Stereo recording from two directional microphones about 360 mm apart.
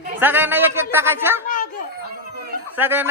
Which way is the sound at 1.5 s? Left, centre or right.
Left.